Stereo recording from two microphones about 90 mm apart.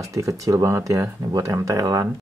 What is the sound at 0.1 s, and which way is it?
Speech, 35° right (ahead or behind).